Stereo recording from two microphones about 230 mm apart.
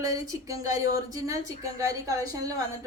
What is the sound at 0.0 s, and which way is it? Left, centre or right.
A woman's voice, centre.